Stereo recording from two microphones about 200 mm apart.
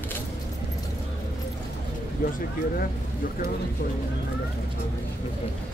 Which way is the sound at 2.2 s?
45° left (ahead or behind).